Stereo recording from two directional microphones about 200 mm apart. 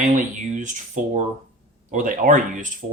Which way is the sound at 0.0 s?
40° right (ahead or behind).